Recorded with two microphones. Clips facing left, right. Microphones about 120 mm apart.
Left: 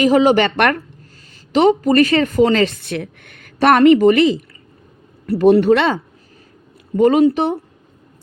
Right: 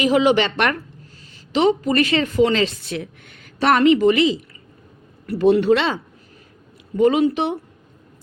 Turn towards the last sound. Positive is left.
turn(degrees=40)  # may be behind; listen again after turning